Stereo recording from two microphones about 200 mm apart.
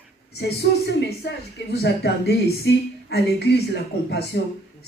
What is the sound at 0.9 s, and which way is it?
Speech, 55° left (ahead or behind).